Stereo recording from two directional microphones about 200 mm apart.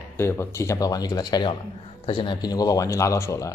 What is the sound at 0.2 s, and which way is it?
Speech, 15° left (ahead or behind).